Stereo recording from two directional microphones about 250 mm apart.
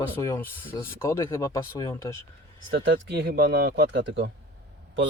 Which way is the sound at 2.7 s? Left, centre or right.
Right.